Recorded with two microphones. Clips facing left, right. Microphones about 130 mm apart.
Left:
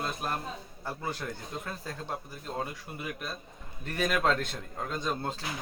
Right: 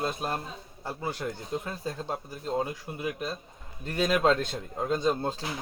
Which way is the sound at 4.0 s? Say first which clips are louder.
Right 4 dB; 15° right (ahead or behind).